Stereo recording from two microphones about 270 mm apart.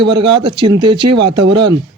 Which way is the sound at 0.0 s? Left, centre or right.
Centre.